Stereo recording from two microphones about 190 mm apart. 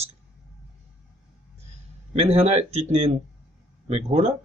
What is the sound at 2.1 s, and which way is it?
Speech, 30° right (ahead or behind).